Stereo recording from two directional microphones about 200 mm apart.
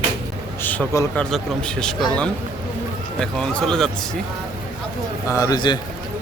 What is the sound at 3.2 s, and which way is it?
Speech, 5° left (ahead or behind).